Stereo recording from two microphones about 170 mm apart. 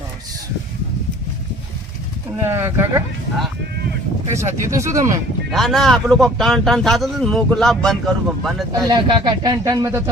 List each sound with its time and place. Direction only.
2.3 s speech: 15° right (ahead or behind)
4.4 s speech: 15° right (ahead or behind)
5.5 s speech: centre (ahead or behind)
8.9 s speech: 25° right (ahead or behind)